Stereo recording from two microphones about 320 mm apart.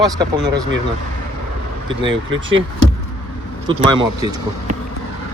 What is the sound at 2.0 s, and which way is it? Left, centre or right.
Speech, right.